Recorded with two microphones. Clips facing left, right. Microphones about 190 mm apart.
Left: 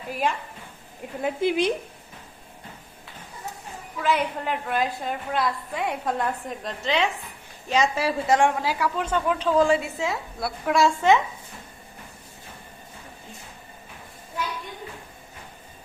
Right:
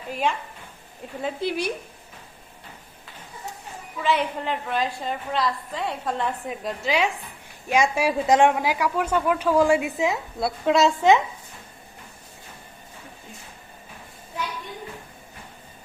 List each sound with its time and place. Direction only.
1.2 s speech: 20° left (ahead or behind)
4.0 s a woman's voice: 5° left (ahead or behind)
6.5 s a woman's voice: 5° right (ahead or behind)